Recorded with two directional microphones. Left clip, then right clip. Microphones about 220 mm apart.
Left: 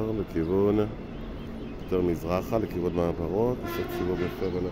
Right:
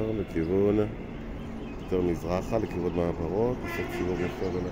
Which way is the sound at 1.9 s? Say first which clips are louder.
Left 1 dB; 10° left (ahead or behind).